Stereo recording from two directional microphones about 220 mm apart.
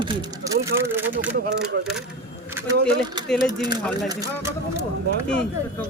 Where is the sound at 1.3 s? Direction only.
45° right (ahead or behind).